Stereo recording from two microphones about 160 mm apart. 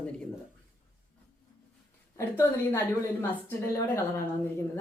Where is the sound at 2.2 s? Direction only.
15° left (ahead or behind).